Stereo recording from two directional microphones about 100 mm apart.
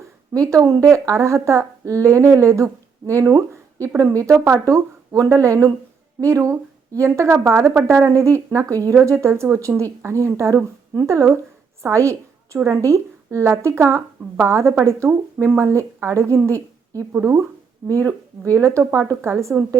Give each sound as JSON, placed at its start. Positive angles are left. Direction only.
{"t": 0.3, "sound": "speech", "side_deg": -35}
{"t": 17.8, "sound": "speech", "side_deg": -35}